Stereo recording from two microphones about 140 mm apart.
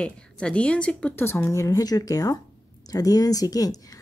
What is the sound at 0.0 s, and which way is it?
A woman's voice, 5° left (ahead or behind).